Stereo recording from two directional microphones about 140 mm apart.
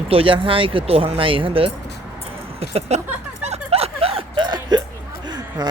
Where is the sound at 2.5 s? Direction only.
45° right (ahead or behind).